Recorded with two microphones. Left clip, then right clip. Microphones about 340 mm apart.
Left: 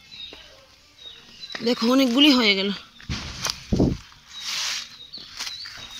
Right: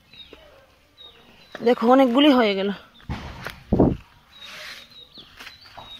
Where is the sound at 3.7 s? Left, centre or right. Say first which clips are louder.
Right 5 dB; right.